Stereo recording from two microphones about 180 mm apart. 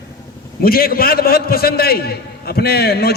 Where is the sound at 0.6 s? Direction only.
55° left (ahead or behind).